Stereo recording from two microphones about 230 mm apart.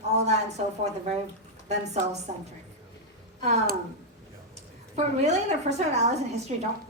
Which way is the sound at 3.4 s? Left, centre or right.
Right.